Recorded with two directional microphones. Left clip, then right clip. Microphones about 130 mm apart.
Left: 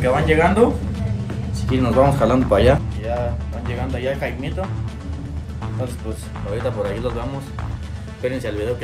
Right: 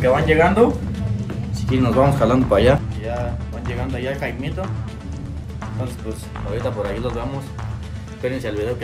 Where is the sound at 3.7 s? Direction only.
25° left (ahead or behind).